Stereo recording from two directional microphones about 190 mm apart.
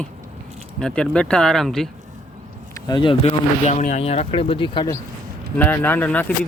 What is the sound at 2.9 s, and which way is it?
Speech, 25° left (ahead or behind).